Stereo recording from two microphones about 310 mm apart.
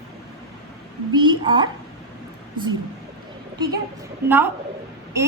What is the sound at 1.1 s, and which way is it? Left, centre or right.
Speech, centre.